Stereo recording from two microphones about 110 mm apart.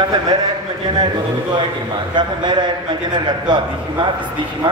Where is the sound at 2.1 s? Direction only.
45° right (ahead or behind).